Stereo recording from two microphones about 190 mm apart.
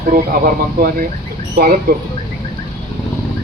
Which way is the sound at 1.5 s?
55° right (ahead or behind).